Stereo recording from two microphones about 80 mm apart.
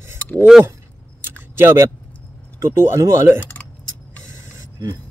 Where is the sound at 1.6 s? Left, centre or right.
Right.